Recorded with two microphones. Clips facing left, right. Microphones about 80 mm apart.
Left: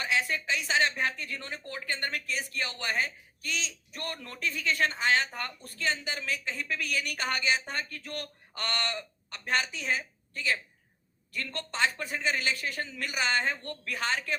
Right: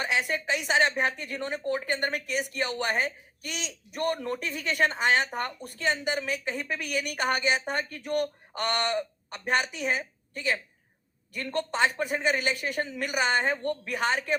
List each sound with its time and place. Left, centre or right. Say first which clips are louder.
0.0 s a woman's voice: right 2 dB; right